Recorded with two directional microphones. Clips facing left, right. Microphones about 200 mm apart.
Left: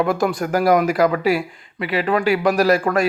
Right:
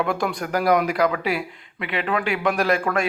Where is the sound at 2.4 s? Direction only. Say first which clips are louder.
Left 4 dB; 40° left (ahead or behind).